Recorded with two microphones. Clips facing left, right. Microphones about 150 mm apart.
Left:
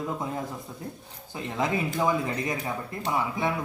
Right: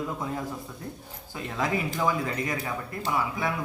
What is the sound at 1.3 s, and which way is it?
Speech, 20° left (ahead or behind).